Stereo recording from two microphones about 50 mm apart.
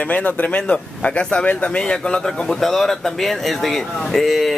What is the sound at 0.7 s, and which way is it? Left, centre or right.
Speech, left.